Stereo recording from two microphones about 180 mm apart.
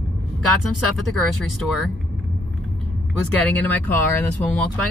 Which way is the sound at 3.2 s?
10° left (ahead or behind).